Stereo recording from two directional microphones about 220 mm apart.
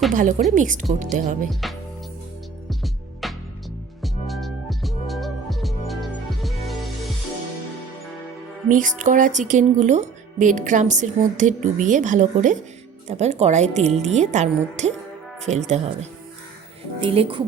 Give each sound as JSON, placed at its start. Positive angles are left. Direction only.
{"t": 0.1, "sound": "speech", "side_deg": -35}
{"t": 2.6, "sound": "music", "side_deg": 0}
{"t": 8.7, "sound": "speech", "side_deg": -35}